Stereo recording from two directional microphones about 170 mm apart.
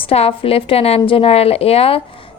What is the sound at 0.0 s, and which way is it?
A woman's voice, 35° left (ahead or behind).